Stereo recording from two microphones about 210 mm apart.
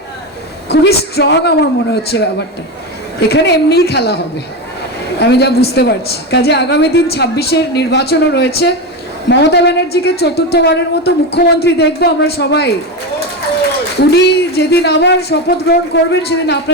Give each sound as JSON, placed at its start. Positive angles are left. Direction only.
{"t": 0.7, "sound": "a woman's voice", "side_deg": 50}
{"t": 5.2, "sound": "a woman's voice", "side_deg": 50}
{"t": 14.0, "sound": "a woman's voice", "side_deg": 55}